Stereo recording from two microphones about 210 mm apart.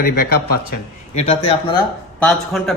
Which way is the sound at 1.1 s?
30° left (ahead or behind).